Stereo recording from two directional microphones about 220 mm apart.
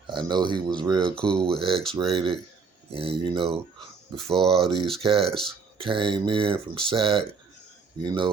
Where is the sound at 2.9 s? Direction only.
25° right (ahead or behind).